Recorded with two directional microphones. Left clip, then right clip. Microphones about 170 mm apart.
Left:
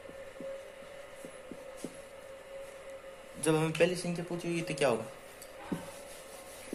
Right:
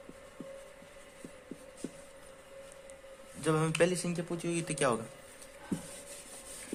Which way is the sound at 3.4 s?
25° right (ahead or behind).